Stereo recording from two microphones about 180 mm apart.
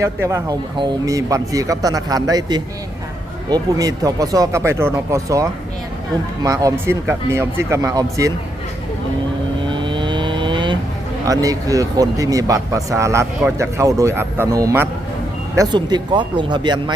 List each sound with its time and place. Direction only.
0.0 s a man's voice: 15° right (ahead or behind)
9.6 s vehicle: 25° right (ahead or behind)
11.3 s a man's voice: 20° right (ahead or behind)